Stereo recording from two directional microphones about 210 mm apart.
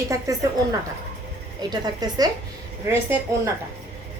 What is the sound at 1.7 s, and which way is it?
Speech, 20° right (ahead or behind).